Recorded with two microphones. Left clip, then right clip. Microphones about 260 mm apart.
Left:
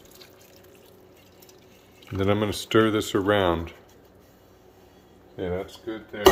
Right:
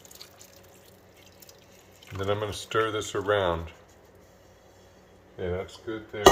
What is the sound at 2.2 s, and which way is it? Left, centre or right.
Speech, left.